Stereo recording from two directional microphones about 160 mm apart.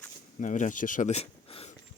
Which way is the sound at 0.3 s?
50° left (ahead or behind).